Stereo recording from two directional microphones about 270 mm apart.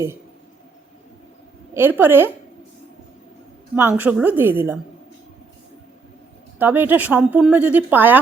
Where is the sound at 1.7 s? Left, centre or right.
Centre.